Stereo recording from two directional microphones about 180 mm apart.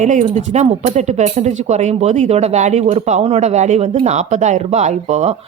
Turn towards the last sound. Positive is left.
turn(degrees=-35)  # may be behind; listen again after turning